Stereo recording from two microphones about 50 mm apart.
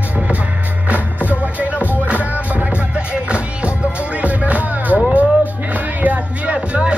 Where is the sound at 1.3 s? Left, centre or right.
Right.